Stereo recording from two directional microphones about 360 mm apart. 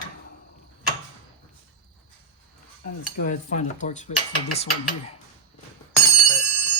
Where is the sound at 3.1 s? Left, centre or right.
Left.